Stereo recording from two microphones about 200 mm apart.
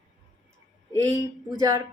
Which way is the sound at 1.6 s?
20° right (ahead or behind).